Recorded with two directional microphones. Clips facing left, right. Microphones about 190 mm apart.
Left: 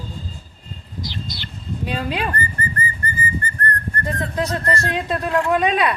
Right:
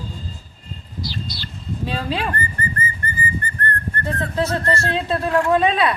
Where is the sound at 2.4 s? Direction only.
20° right (ahead or behind).